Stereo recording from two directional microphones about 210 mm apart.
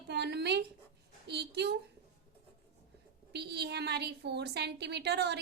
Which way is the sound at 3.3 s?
50° right (ahead or behind).